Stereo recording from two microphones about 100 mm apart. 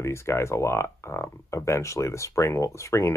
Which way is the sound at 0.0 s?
30° left (ahead or behind).